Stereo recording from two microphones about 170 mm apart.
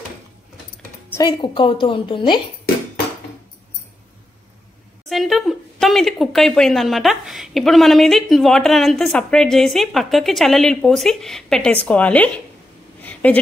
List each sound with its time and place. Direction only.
1.1 s a woman's voice: 25° left (ahead or behind)
5.1 s speech: centre (ahead or behind)
13.0 s a sound: 10° left (ahead or behind)